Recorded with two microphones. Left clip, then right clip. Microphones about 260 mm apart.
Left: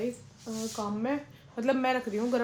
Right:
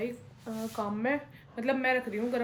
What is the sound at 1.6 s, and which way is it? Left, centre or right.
Speech, centre.